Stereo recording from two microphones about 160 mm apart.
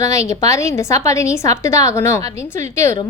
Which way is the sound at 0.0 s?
20° left (ahead or behind).